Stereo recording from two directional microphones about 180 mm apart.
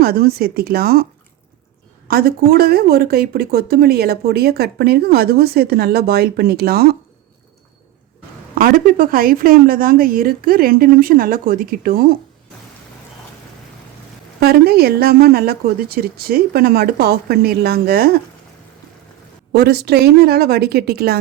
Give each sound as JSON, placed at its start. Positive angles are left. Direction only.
{"t": 0.0, "sound": "speech", "side_deg": -60}
{"t": 2.0, "sound": "speech", "side_deg": -55}
{"t": 8.5, "sound": "a woman's voice", "side_deg": -55}
{"t": 14.4, "sound": "speech", "side_deg": -60}
{"t": 19.5, "sound": "speech", "side_deg": -60}